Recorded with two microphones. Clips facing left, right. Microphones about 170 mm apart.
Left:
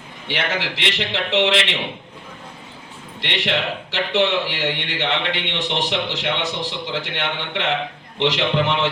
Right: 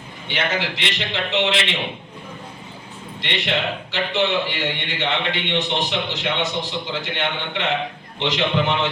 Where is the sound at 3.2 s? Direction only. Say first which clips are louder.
Left 1 dB; 70° left (ahead or behind).